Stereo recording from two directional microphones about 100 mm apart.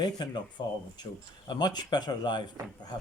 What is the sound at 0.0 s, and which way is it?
Speech, 45° left (ahead or behind).